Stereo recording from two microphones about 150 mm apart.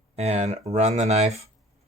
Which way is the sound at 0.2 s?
45° right (ahead or behind).